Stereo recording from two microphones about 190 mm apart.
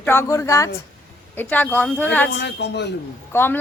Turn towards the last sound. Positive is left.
turn(degrees=10)  # may be behind; listen again after turning